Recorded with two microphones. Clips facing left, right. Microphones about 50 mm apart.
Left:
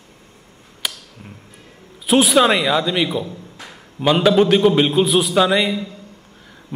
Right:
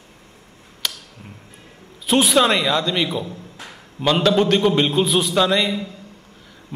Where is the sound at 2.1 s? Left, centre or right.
Centre.